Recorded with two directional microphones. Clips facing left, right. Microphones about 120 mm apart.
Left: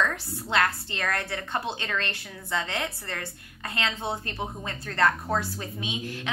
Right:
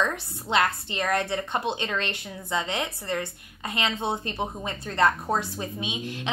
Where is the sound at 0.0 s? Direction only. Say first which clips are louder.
Right 1 dB; 20° right (ahead or behind).